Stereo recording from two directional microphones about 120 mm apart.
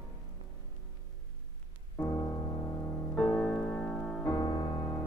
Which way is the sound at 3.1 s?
10° left (ahead or behind).